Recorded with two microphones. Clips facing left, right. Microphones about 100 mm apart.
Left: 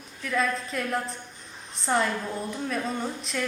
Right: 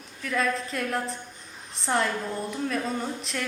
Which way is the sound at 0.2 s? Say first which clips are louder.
Even; centre (ahead or behind).